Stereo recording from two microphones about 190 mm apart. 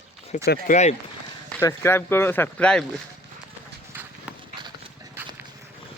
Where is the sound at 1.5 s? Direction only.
15° left (ahead or behind).